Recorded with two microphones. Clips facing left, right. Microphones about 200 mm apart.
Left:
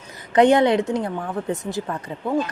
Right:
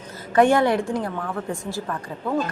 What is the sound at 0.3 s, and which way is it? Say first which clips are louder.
Speech: left 2 dB; 20° left (ahead or behind).